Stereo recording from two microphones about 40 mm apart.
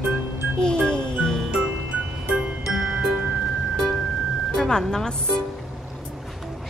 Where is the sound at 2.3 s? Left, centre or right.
Centre.